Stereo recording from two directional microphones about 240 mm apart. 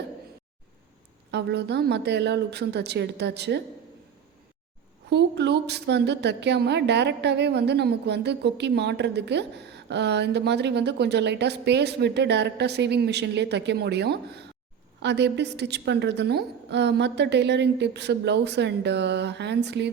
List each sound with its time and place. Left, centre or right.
1.3 s a woman's voice: right
5.0 s a woman's voice: right